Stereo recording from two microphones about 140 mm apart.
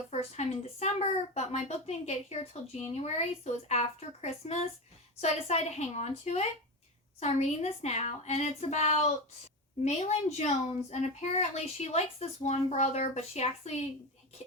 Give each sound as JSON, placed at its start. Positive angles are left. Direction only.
{"t": 0.1, "sound": "speech", "side_deg": 50}